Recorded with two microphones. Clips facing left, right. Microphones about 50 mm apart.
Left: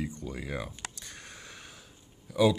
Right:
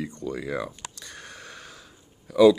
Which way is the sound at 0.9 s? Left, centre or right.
Right.